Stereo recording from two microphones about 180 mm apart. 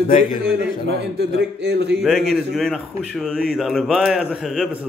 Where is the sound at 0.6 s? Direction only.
70° right (ahead or behind).